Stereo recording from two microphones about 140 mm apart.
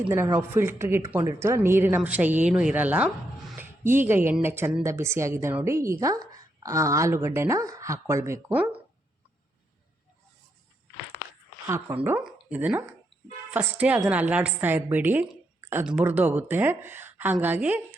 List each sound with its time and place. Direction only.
0.3 s a woman's voice: 15° right (ahead or behind)
11.7 s a woman's voice: 15° right (ahead or behind)